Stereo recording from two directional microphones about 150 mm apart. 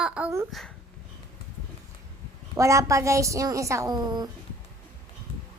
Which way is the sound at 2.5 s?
20° right (ahead or behind).